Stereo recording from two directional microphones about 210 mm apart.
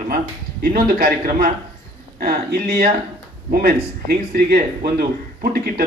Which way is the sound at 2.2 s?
45° right (ahead or behind).